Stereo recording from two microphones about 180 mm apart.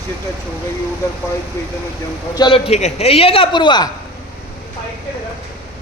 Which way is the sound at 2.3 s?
25° left (ahead or behind).